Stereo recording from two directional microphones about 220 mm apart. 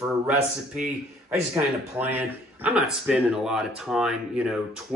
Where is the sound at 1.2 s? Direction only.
10° right (ahead or behind).